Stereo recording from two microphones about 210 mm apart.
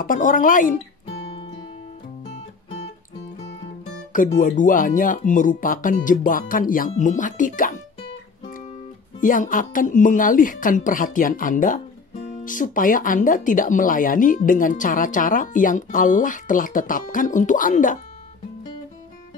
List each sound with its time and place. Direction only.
0.0 s speech: 40° left (ahead or behind)
4.1 s speech: 40° left (ahead or behind)
9.2 s speech: 40° left (ahead or behind)